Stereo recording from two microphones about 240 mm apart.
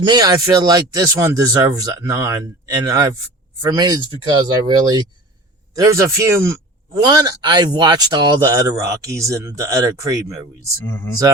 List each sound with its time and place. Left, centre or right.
0.0 s speech: centre
10.8 s speech: centre